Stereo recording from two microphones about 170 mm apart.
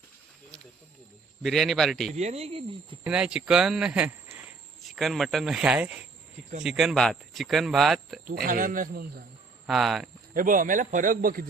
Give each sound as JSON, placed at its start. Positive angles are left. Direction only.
{"t": 1.4, "sound": "speech", "side_deg": 0}
{"t": 2.1, "sound": "speech", "side_deg": -40}
{"t": 3.0, "sound": "speech", "side_deg": -5}
{"t": 8.3, "sound": "a man's voice", "side_deg": -55}
{"t": 9.6, "sound": "speech", "side_deg": 0}
{"t": 10.3, "sound": "a man's voice", "side_deg": -50}